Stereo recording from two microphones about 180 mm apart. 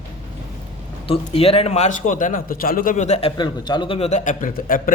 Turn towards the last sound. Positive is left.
turn(degrees=50)  # may be behind; listen again after turning